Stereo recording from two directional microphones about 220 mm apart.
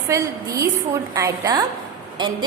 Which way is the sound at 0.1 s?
15° right (ahead or behind).